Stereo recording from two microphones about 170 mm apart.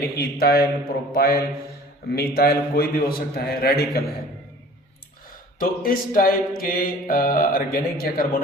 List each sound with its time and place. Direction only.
0.2 s a man's voice: 65° left (ahead or behind)
5.5 s a man's voice: 55° left (ahead or behind)